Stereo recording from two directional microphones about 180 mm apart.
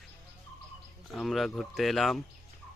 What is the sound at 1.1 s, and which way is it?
Speech, centre (ahead or behind).